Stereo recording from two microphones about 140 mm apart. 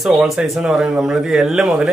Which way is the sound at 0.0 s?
5° right (ahead or behind).